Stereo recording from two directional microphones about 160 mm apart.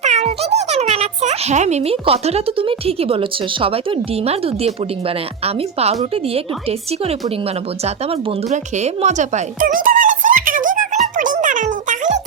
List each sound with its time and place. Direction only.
0.0 s a child's voice: 45° right (ahead or behind)